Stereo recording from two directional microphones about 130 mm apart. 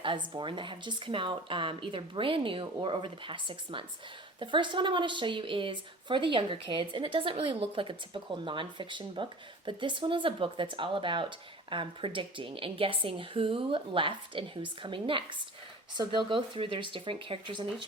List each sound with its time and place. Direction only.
0.0 s speech: 40° right (ahead or behind)